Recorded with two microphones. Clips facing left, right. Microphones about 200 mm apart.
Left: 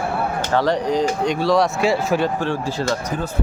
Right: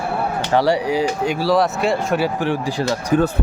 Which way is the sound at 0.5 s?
10° right (ahead or behind).